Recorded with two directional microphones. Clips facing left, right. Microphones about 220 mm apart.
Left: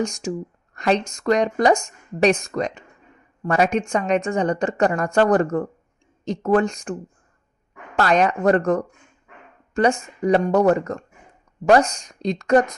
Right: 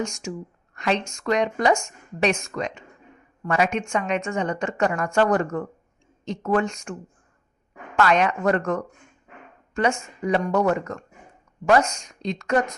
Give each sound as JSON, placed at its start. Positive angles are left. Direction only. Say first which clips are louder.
{"t": 0.0, "sound": "speech", "louder": "left 5 dB", "side_deg": 35}
{"t": 7.9, "sound": "speech", "louder": "left 2 dB", "side_deg": 40}